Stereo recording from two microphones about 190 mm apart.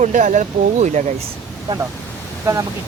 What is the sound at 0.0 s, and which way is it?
Speech, 40° right (ahead or behind).